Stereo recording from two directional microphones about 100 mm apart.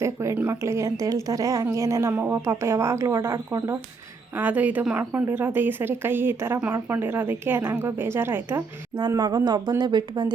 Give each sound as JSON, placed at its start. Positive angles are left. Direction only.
{"t": 0.0, "sound": "a woman's voice", "side_deg": -30}
{"t": 4.4, "sound": "a woman's voice", "side_deg": -15}
{"t": 9.0, "sound": "speech", "side_deg": -45}